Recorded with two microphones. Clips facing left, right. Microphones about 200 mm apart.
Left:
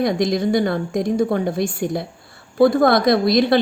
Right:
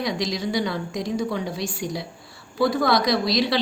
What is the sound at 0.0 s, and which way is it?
A woman's voice, 55° left (ahead or behind).